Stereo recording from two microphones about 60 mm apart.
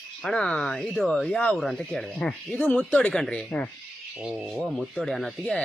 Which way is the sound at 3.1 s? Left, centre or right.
Centre.